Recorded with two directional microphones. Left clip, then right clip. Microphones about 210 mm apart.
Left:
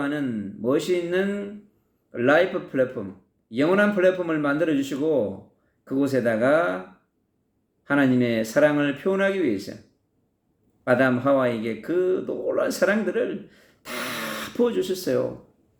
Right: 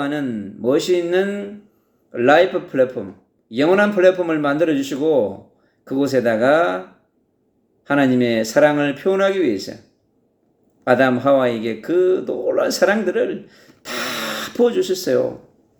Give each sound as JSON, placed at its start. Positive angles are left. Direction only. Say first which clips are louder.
{"t": 0.0, "sound": "speech", "louder": "right 4 dB", "side_deg": 10}
{"t": 7.9, "sound": "speech", "louder": "right 5 dB", "side_deg": 10}
{"t": 10.8, "sound": "speech", "louder": "right 5 dB", "side_deg": 5}